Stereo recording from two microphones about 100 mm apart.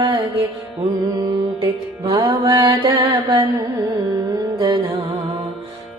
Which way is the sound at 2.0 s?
45° right (ahead or behind).